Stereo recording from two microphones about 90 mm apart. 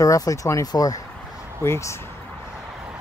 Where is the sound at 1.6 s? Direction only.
30° left (ahead or behind).